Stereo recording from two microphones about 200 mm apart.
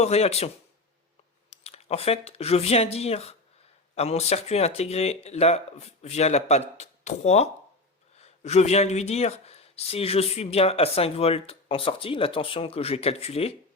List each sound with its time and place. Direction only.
0.0 s speech: 30° left (ahead or behind)